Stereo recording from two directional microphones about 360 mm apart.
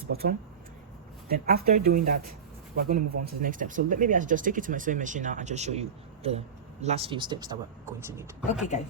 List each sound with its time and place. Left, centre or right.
0.0 s speech: right; by 8.6 s centre